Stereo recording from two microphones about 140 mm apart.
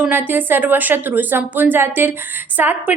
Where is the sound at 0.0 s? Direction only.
15° right (ahead or behind).